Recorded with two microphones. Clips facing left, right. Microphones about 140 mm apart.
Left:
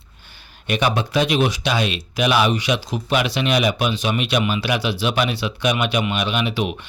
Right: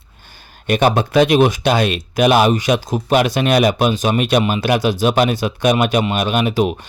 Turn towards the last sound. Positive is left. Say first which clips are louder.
# right 5 dB
turn(degrees=-45)  # may be behind; listen again after turning